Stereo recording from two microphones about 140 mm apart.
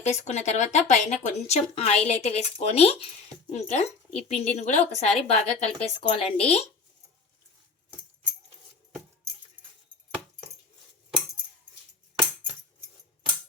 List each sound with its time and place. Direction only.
0.0 s speech: 50° left (ahead or behind)